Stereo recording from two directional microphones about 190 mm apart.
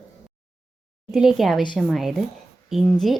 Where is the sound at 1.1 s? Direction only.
5° right (ahead or behind).